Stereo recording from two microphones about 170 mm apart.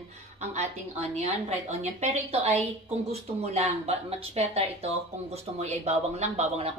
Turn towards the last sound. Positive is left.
turn(degrees=-40)  # may be behind; listen again after turning